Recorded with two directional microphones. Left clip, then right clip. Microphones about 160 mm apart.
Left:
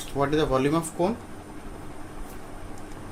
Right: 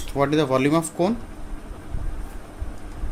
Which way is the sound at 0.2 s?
90° right.